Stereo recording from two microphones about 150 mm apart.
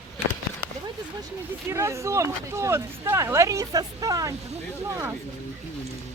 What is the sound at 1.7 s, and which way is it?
Speech, 20° right (ahead or behind).